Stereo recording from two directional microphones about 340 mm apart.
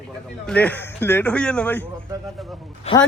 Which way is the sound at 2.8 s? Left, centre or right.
Centre.